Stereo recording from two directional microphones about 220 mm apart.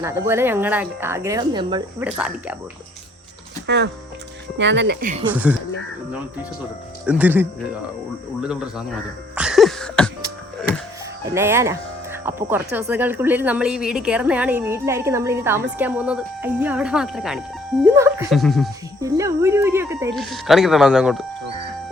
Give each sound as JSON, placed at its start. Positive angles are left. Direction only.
{"t": 0.0, "sound": "speech", "side_deg": -10}
{"t": 2.0, "sound": "speech", "side_deg": -5}
{"t": 3.7, "sound": "speech", "side_deg": -50}
{"t": 5.3, "sound": "speech", "side_deg": -5}
{"t": 7.0, "sound": "speech", "side_deg": -5}
{"t": 9.3, "sound": "a sound", "side_deg": -5}
{"t": 11.3, "sound": "speech", "side_deg": -10}
{"t": 17.9, "sound": "speech", "side_deg": -10}
{"t": 18.3, "sound": "speech", "side_deg": 0}
{"t": 19.0, "sound": "speech", "side_deg": -15}
{"t": 20.1, "sound": "speech", "side_deg": 0}